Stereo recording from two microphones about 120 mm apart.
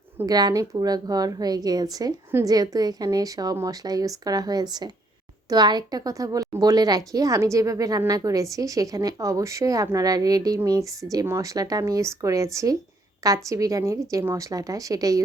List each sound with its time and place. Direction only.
0.3 s a woman's voice: 35° right (ahead or behind)